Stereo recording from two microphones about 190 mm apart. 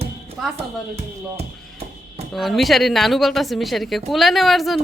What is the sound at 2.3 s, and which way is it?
A woman's voice, centre (ahead or behind).